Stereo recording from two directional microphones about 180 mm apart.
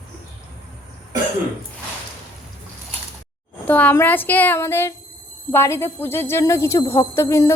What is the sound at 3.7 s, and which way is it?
Speech, 10° left (ahead or behind).